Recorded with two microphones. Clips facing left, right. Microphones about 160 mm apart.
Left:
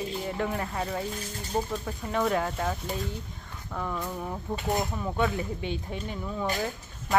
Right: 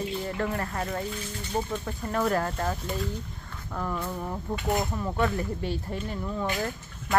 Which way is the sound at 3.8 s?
Centre (ahead or behind).